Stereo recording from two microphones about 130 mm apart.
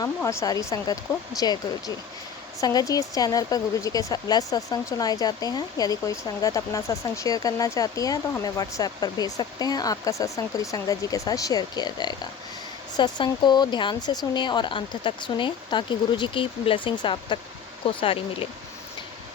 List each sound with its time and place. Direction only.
0.2 s speech: 20° left (ahead or behind)
2.6 s speech: 30° left (ahead or behind); by 18.4 s 45° left (ahead or behind)